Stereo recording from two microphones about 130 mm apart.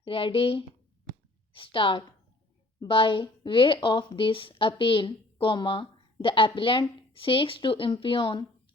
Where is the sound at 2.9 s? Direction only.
40° left (ahead or behind).